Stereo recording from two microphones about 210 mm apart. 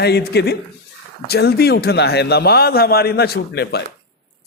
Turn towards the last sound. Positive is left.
turn(degrees=50)  # may be behind; listen again after turning